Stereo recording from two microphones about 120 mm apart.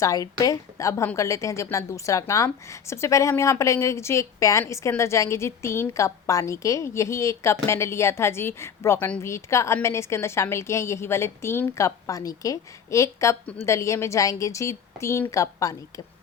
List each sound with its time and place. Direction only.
0.0 s a woman's voice: 30° left (ahead or behind)